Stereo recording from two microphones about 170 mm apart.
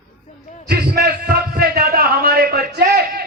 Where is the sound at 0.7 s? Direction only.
65° right (ahead or behind).